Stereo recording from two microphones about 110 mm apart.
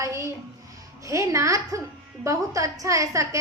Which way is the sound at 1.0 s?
30° right (ahead or behind).